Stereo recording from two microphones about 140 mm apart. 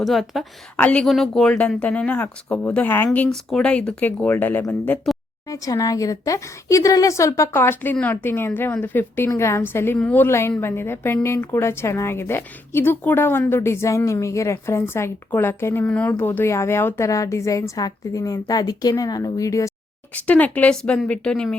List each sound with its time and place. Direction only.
0.0 s a woman's voice: centre (ahead or behind); by 19.7 s 20° left (ahead or behind)
20.1 s speech: 10° left (ahead or behind)